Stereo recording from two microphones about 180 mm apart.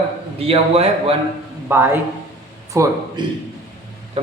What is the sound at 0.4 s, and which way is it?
Speech, 35° right (ahead or behind).